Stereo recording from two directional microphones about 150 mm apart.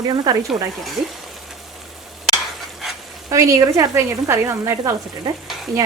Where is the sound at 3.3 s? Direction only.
20° right (ahead or behind).